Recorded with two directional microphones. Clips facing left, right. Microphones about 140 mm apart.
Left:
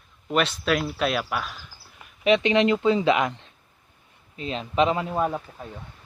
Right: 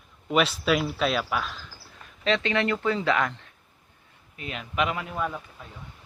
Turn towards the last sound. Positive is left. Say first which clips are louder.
# left 5 dB
turn(degrees=35)  # may be behind; listen again after turning